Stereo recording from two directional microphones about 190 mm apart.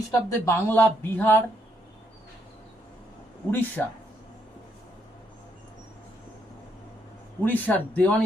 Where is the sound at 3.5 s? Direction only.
10° left (ahead or behind).